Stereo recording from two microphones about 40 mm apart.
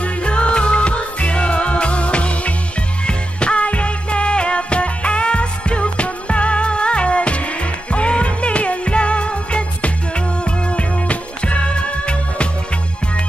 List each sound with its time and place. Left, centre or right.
0.0 s music: left